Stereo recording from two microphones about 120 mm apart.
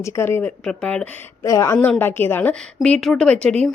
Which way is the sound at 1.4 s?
25° left (ahead or behind).